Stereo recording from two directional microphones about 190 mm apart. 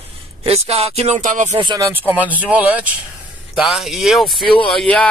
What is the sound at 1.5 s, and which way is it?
Speech, 25° right (ahead or behind).